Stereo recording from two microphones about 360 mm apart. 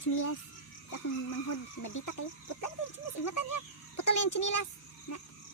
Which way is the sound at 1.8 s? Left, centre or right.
Left.